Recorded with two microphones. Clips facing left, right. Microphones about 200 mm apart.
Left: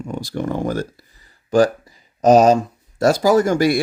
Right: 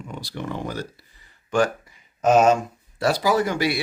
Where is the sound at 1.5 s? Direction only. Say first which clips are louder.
Left 6 dB; 35° left (ahead or behind).